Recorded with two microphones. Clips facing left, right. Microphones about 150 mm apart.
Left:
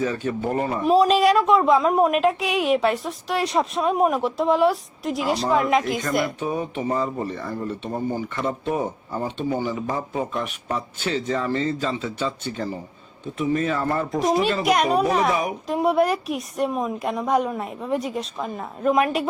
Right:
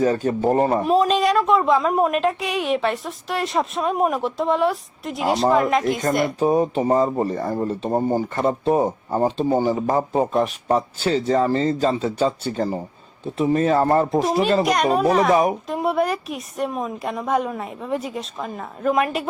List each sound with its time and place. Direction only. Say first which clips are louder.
0.0 s speech: right 5 dB; 40° right (ahead or behind)
0.9 s a woman's voice: left 1 dB; centre (ahead or behind)
6.4 s speech: right 7 dB; 35° right (ahead or behind)
14.6 s a woman's voice: even; centre (ahead or behind)
15.3 s speech: right 6 dB; 40° right (ahead or behind)
15.6 s a woman's voice: left 1 dB; centre (ahead or behind)